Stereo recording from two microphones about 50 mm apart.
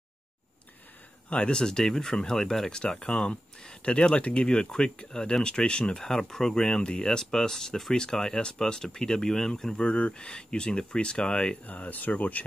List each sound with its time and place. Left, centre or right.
1.3 s speech: centre
9.8 s speech: left
11.6 s speech: left